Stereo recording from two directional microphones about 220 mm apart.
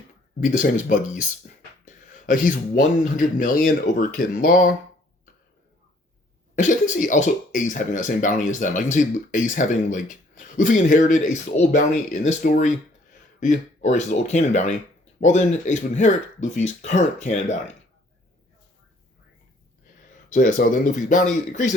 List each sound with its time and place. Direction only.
0.3 s speech: 35° left (ahead or behind)
6.6 s speech: 35° left (ahead or behind)
20.3 s speech: 40° left (ahead or behind)